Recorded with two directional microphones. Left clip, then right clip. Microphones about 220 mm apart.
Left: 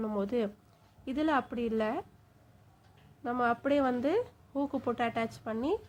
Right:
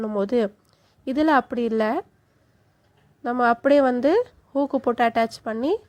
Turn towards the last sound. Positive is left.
turn(degrees=-35)  # may be behind; listen again after turning